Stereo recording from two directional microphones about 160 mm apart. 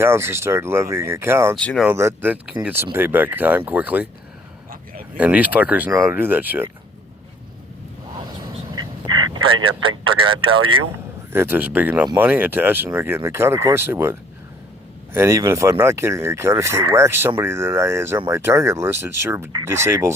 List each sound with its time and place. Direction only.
0.0 s speech: 15° right (ahead or behind)
1.5 s speech: 5° left (ahead or behind)
1.9 s speech: 15° right (ahead or behind)
5.1 s speech: 10° right (ahead or behind)
9.3 s speech: 30° right (ahead or behind)
11.3 s speech: 15° right (ahead or behind)